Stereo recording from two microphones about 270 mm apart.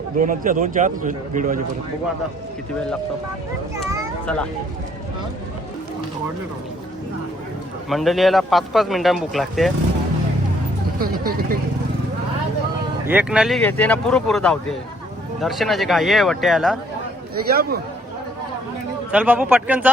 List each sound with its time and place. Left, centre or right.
0.2 s a man's voice: right
7.9 s a man's voice: centre
11.0 s speech: right
13.1 s a man's voice: centre
17.5 s speech: right
19.1 s a man's voice: centre